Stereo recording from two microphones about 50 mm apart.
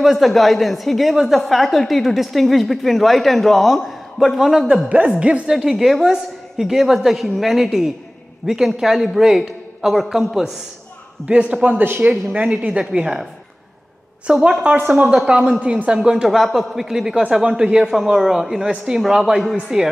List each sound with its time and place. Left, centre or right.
0.0 s a woman's voice: centre
4.8 s a woman's voice: right
5.5 s a man's voice: centre
11.2 s a woman's voice: right
14.5 s a woman's voice: right
15.6 s a woman's voice: right
15.9 s a man's voice: centre